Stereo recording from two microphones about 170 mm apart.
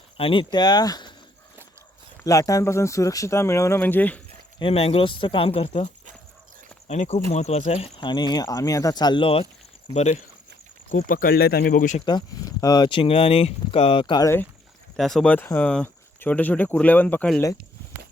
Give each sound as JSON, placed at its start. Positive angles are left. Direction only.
{"t": 0.2, "sound": "speech", "side_deg": 30}
{"t": 2.2, "sound": "speech", "side_deg": 20}
{"t": 4.6, "sound": "speech", "side_deg": 35}
{"t": 6.8, "sound": "speech", "side_deg": 40}
{"t": 7.9, "sound": "speech", "side_deg": 25}
{"t": 9.9, "sound": "speech", "side_deg": 45}
{"t": 10.9, "sound": "speech", "side_deg": 55}
{"t": 12.0, "sound": "speech", "side_deg": 25}
{"t": 14.9, "sound": "speech", "side_deg": 0}